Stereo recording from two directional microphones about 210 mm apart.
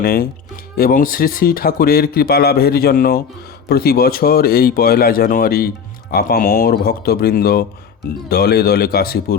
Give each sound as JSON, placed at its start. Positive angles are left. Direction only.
{"t": 0.0, "sound": "speech", "side_deg": 45}